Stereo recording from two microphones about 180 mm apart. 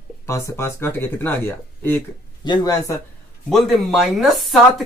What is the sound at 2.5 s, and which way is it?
Speech, 20° left (ahead or behind).